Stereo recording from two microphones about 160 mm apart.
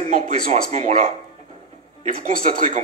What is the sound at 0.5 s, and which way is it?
Speech, 45° right (ahead or behind).